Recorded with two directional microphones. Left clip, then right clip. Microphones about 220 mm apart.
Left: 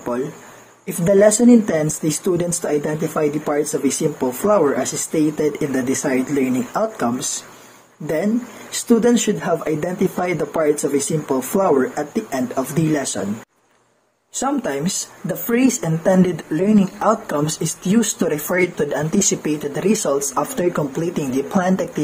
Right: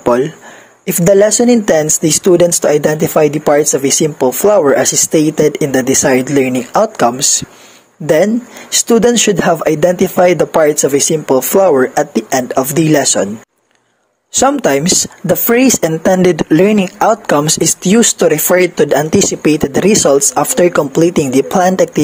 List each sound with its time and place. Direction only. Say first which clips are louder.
0.8 s speech: right 5 dB; 45° right (ahead or behind)
14.4 s speech: right 11 dB; 45° right (ahead or behind)